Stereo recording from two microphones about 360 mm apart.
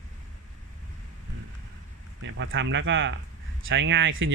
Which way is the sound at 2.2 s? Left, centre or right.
Right.